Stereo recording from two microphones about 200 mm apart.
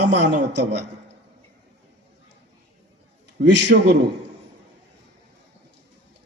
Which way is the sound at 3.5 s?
60° right (ahead or behind).